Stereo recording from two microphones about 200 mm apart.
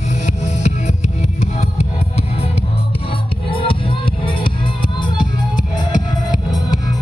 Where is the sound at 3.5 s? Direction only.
25° left (ahead or behind).